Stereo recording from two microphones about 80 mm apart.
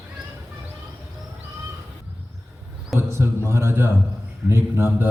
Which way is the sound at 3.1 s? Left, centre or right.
Right.